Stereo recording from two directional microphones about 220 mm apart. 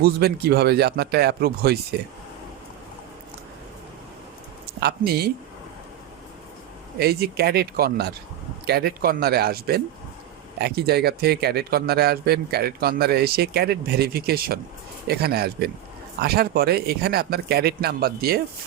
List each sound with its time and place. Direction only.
0.0 s speech: 45° right (ahead or behind)
4.8 s speech: 45° right (ahead or behind)
7.0 s speech: 45° right (ahead or behind)